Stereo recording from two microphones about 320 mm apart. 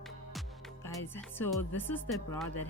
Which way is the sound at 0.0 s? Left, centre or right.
Centre.